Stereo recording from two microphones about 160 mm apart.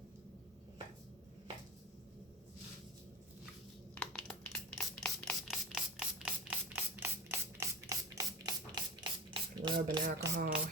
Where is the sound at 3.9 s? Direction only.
10° left (ahead or behind); by 8.0 s 15° right (ahead or behind).